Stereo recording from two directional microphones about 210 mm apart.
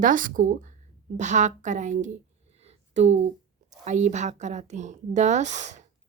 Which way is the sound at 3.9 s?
35° right (ahead or behind).